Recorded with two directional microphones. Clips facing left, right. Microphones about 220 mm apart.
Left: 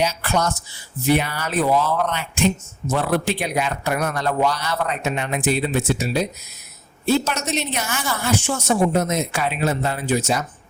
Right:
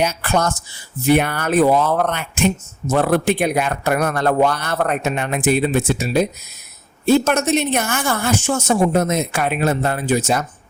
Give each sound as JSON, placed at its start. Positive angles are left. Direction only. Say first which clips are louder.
{"t": 0.0, "sound": "speech", "louder": "right 2 dB", "side_deg": -55}